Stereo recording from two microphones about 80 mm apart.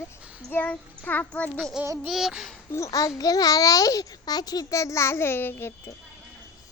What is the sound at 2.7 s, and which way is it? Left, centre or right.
A child's voice, left.